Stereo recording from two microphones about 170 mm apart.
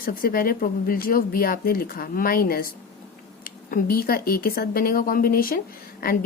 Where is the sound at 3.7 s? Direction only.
60° left (ahead or behind).